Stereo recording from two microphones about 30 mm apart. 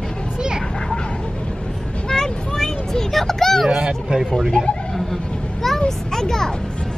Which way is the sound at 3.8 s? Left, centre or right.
Centre.